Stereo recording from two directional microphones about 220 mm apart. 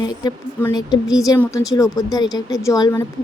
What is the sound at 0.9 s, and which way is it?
Speech, 15° left (ahead or behind).